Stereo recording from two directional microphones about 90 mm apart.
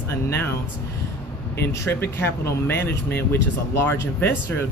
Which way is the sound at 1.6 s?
25° left (ahead or behind).